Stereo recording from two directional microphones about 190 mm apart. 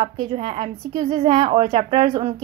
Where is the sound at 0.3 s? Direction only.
30° right (ahead or behind).